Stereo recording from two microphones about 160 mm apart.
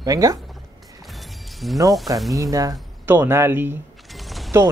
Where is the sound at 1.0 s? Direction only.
Centre (ahead or behind).